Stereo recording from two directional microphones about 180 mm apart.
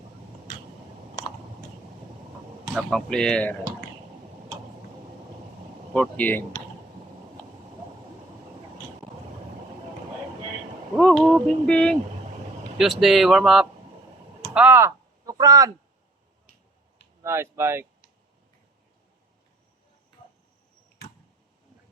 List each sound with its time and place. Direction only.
2.6 s speech: centre (ahead or behind)
5.9 s speech: 5° left (ahead or behind)
10.9 s speech: centre (ahead or behind)
14.5 s a sound: 10° right (ahead or behind)
17.2 s speech: 15° right (ahead or behind)